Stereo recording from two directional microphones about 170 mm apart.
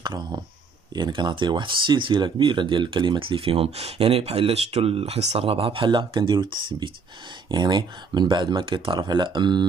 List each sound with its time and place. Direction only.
0.0 s speech: 25° right (ahead or behind)